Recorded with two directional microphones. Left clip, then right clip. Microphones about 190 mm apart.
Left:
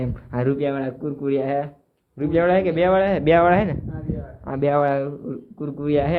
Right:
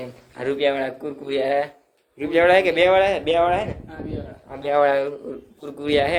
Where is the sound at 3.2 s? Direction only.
35° left (ahead or behind).